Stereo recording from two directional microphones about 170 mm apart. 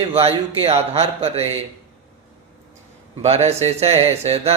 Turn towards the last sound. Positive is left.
turn(degrees=-40)  # may be behind; listen again after turning